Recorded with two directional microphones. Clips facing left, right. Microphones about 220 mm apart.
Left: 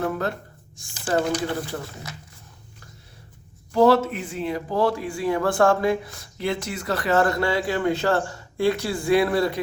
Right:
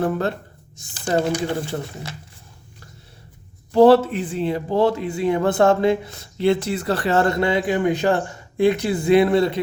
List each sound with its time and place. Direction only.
0.0 s speech: 30° right (ahead or behind)
3.7 s speech: 30° right (ahead or behind)